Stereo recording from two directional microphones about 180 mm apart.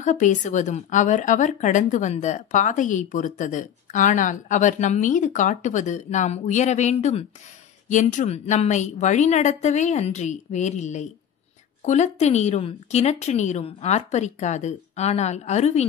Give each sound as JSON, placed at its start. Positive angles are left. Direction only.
{"t": 0.0, "sound": "a woman's voice", "side_deg": 45}